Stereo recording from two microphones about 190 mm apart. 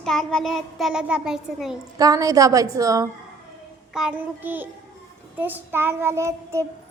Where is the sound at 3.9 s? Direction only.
5° right (ahead or behind).